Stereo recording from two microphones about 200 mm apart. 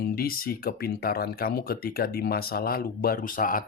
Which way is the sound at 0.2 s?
45° left (ahead or behind).